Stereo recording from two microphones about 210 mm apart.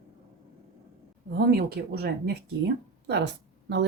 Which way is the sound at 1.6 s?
50° right (ahead or behind).